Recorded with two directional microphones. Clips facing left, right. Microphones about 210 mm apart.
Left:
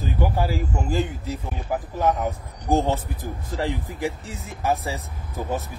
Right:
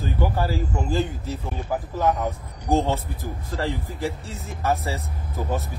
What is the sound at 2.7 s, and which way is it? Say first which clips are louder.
Speech: even; 15° left (ahead or behind).